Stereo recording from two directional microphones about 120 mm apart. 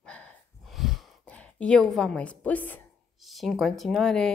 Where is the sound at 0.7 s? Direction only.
Centre (ahead or behind).